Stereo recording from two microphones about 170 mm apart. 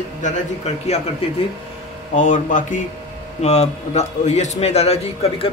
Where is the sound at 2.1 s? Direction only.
45° left (ahead or behind).